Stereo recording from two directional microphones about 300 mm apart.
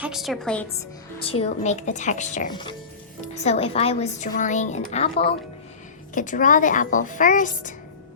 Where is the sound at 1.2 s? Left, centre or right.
Centre.